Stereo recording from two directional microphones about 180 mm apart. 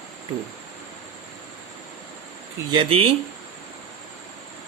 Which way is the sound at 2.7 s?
30° right (ahead or behind).